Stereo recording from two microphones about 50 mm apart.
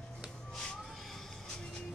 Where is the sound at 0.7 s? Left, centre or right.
Centre.